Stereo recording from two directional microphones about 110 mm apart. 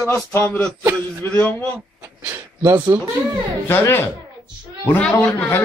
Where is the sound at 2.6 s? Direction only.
20° right (ahead or behind).